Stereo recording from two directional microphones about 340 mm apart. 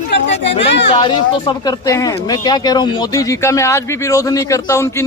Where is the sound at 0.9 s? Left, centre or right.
Centre.